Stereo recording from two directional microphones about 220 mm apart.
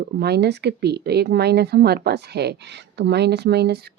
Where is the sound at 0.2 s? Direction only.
50° right (ahead or behind).